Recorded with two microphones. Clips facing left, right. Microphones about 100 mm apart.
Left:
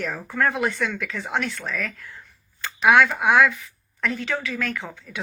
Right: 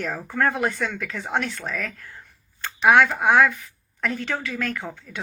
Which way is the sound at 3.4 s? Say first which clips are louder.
Even; 45° right (ahead or behind).